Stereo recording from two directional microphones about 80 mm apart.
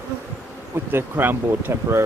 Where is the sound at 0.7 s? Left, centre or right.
Right.